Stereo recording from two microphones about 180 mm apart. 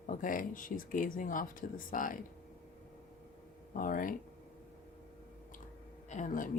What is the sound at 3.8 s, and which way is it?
Speech, 50° left (ahead or behind).